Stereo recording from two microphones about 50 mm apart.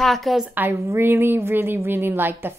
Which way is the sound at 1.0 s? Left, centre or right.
Right.